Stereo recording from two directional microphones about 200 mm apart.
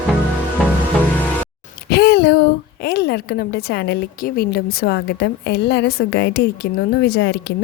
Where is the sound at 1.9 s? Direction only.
55° left (ahead or behind).